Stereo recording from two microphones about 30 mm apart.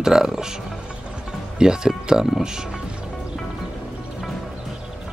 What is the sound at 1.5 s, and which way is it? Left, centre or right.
Speech, right.